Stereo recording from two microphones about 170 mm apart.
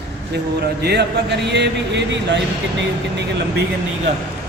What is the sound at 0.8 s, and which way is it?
Speech, 75° right (ahead or behind).